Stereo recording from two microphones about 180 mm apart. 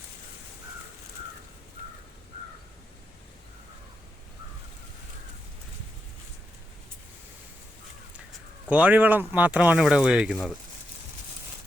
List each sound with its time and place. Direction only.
8.7 s speech: 10° right (ahead or behind)